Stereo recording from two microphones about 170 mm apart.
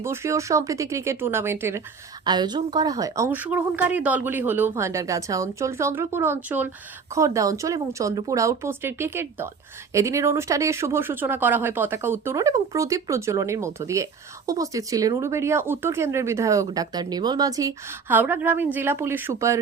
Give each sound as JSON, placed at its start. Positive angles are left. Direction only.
{"t": 0.0, "sound": "speech", "side_deg": -15}
{"t": 2.2, "sound": "speech", "side_deg": -25}
{"t": 3.2, "sound": "speech", "side_deg": -10}